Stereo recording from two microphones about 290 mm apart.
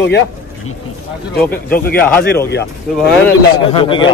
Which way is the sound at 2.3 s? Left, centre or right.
Left.